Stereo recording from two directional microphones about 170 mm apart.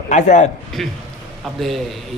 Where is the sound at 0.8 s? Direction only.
Centre (ahead or behind).